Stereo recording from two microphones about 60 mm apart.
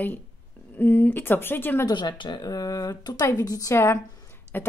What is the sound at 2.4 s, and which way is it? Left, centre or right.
A woman's voice, left.